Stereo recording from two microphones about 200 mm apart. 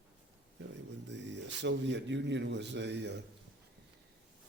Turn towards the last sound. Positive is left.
turn(degrees=-60)  # may be behind; listen again after turning